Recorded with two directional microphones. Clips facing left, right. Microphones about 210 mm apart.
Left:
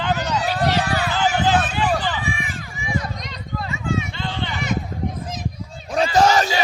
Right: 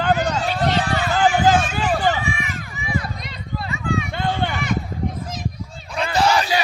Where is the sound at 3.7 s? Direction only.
25° left (ahead or behind).